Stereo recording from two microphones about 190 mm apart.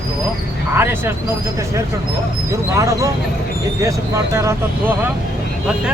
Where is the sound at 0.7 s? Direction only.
10° right (ahead or behind).